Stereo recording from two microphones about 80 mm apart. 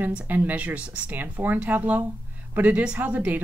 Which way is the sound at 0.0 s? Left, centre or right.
Right.